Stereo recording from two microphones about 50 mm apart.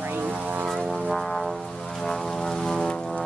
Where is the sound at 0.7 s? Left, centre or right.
Centre.